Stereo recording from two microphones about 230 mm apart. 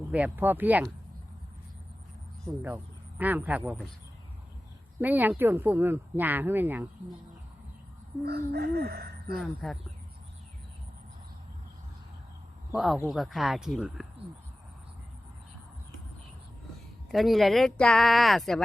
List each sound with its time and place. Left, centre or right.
0.1 s speech: centre
2.6 s speech: centre
4.9 s speech: centre
8.2 s speech: right
9.4 s speech: centre
12.7 s speech: centre
17.1 s speech: centre